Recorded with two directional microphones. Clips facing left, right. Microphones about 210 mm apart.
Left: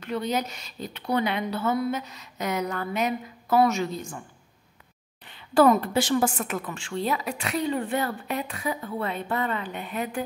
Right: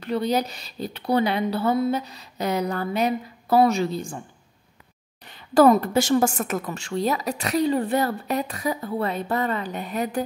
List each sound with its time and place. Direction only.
0.0 s a woman's voice: 35° right (ahead or behind)
5.3 s a woman's voice: 40° right (ahead or behind)